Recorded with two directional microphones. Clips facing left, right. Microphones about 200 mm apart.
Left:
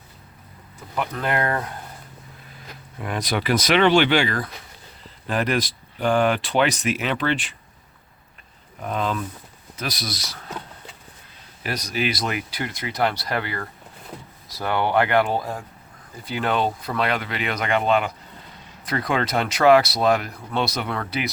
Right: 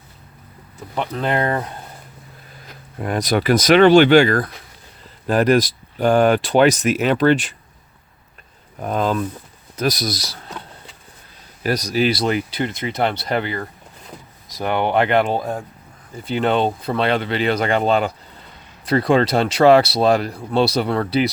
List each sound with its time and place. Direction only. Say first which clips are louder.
0.9 s speech: right 3 dB; 25° right (ahead or behind)
3.0 s speech: right 6 dB; 40° right (ahead or behind)
8.8 s speech: right 5 dB; 40° right (ahead or behind)
11.6 s speech: right 7 dB; 40° right (ahead or behind)